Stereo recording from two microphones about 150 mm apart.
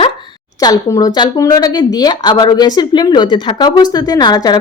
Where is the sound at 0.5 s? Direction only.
25° left (ahead or behind).